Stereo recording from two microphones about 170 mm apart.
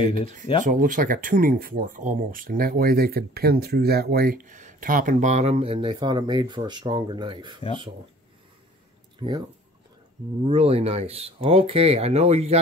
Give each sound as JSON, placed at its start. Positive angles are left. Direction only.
{"t": 0.7, "sound": "speech", "side_deg": -50}
{"t": 9.2, "sound": "speech", "side_deg": -30}
{"t": 10.4, "sound": "speech", "side_deg": -35}